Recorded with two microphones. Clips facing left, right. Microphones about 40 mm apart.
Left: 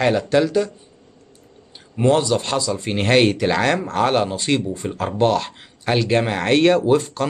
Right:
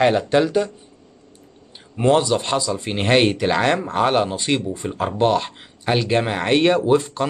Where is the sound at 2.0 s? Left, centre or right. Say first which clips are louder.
Even; centre.